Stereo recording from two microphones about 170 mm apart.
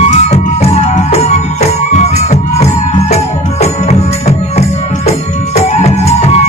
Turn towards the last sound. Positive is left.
turn(degrees=40)  # may be behind; listen again after turning